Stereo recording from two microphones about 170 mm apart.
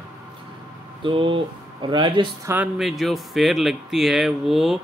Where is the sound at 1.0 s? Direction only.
30° right (ahead or behind).